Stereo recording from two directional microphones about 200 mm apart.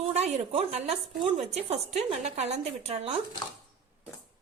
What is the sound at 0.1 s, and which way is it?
A woman's voice, 30° right (ahead or behind).